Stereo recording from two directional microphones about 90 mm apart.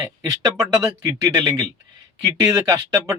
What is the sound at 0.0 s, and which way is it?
Speech, 40° right (ahead or behind).